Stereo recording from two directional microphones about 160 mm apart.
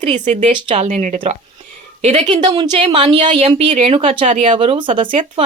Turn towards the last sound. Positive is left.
turn(degrees=-30)  # may be behind; listen again after turning